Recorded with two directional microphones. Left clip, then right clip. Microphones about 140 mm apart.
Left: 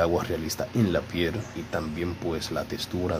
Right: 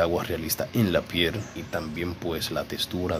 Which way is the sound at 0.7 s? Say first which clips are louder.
Right 2 dB; 10° right (ahead or behind).